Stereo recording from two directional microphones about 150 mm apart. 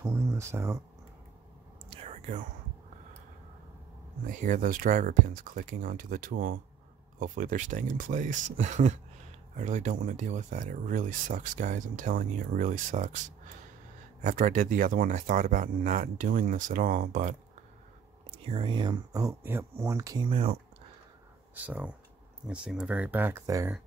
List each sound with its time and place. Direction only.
0.0 s a sound: 20° right (ahead or behind)
1.9 s whispering: 45° right (ahead or behind)
4.3 s speech: 60° right (ahead or behind)
14.2 s speech: 60° right (ahead or behind)
18.4 s speech: 35° right (ahead or behind)
21.5 s speech: 10° right (ahead or behind)